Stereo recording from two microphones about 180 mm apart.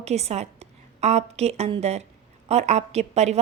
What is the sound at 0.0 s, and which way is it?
A woman's voice, 35° right (ahead or behind).